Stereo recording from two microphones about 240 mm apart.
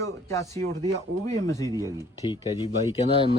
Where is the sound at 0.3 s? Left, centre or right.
Centre.